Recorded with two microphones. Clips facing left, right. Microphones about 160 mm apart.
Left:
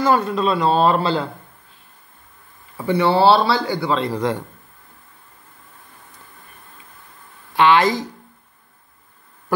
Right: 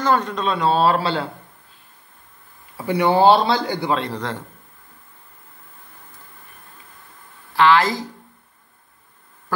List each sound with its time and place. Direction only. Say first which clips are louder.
0.0 s speech: left 2 dB; 10° left (ahead or behind)
2.9 s speech: even; 15° right (ahead or behind)
4.1 s a man's voice: left 6 dB; 15° left (ahead or behind)
7.5 s speech: left 1 dB; 20° left (ahead or behind)